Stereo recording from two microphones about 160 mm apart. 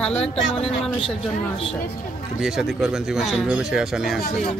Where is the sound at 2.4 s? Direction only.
5° right (ahead or behind).